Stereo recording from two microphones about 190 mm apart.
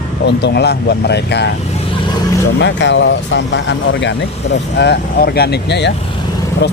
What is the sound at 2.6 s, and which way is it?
Speech, 70° left (ahead or behind).